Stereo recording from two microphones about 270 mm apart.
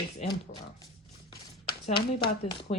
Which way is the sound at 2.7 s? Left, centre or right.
Left.